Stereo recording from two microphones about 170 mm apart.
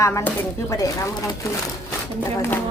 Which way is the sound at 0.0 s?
15° left (ahead or behind).